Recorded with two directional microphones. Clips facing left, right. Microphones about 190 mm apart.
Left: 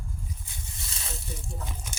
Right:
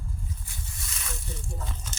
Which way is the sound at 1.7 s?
10° left (ahead or behind).